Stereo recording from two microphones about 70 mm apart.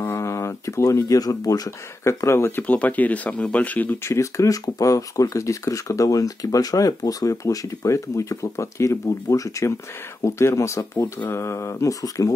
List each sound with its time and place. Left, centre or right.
0.0 s speech: left
2.0 s speech: left
2.6 s speech: left
4.0 s speech: left